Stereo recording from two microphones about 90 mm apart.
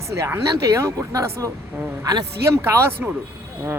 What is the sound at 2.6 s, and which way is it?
Speech, 30° right (ahead or behind).